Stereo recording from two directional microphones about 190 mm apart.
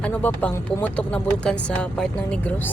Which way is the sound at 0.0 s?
5° left (ahead or behind).